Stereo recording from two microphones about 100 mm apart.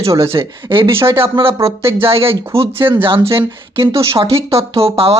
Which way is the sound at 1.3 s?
65° right (ahead or behind).